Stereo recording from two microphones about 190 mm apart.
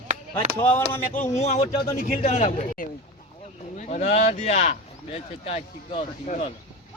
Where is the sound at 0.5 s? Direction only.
10° left (ahead or behind).